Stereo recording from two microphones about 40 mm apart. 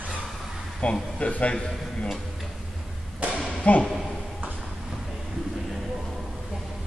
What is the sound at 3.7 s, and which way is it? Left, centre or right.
Speech, left.